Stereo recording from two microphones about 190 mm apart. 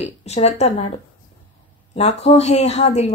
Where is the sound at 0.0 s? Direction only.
35° left (ahead or behind).